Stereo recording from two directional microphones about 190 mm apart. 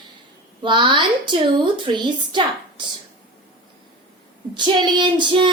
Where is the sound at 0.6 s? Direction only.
25° right (ahead or behind).